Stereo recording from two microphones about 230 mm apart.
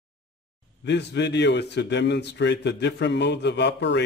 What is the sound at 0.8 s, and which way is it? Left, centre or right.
Speech, left.